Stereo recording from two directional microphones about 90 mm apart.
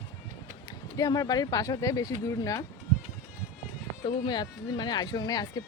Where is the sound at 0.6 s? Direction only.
45° left (ahead or behind).